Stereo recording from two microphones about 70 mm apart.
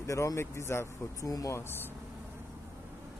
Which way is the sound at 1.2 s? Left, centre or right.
Left.